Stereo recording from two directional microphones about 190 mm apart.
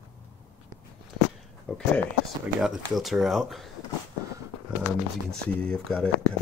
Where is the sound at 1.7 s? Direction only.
Centre (ahead or behind).